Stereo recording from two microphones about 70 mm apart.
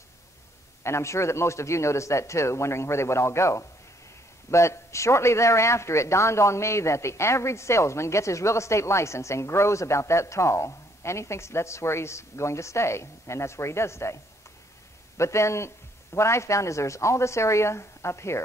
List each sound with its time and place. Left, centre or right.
0.8 s a man's voice: left